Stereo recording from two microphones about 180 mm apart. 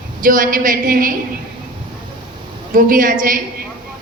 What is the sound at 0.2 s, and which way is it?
Speech, 50° right (ahead or behind).